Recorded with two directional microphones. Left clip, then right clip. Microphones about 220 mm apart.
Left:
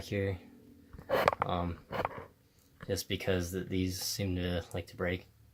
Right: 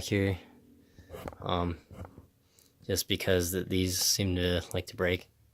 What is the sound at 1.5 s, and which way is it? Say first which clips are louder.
Speech: right 3 dB; 45° right (ahead or behind).